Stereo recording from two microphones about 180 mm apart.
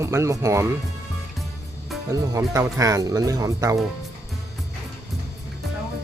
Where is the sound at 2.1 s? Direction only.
20° right (ahead or behind).